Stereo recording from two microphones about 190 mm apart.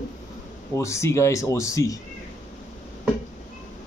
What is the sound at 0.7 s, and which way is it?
Speech, 15° left (ahead or behind).